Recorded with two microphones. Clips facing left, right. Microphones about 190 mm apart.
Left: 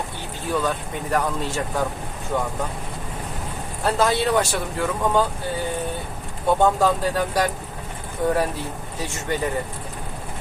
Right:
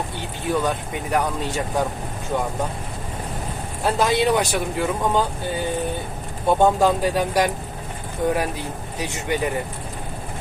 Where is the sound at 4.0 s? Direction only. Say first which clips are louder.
Right 1 dB; 20° right (ahead or behind).